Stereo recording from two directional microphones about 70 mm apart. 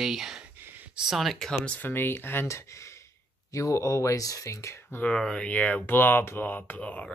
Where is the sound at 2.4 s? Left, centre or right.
Left.